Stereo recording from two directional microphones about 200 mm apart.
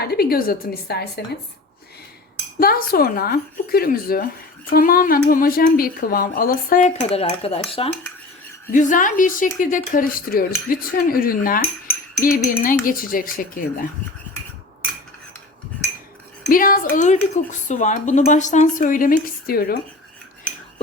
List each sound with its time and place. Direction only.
0.0 s speech: 50° left (ahead or behind)
2.6 s speech: 50° left (ahead or behind); by 7.6 s 30° left (ahead or behind)
8.7 s speech: 40° left (ahead or behind)
16.5 s speech: 45° left (ahead or behind)